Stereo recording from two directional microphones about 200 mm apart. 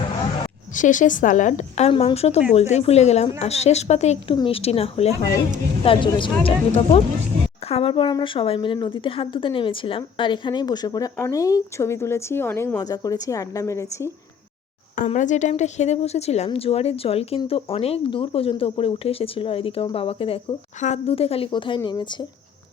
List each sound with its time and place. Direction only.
0.7 s a woman's voice: 40° left (ahead or behind); by 14.1 s 15° left (ahead or behind)
14.9 s speech: 40° left (ahead or behind); by 22.3 s 20° left (ahead or behind)